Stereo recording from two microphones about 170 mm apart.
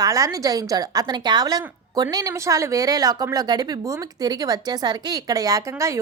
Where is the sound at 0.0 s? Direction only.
20° right (ahead or behind).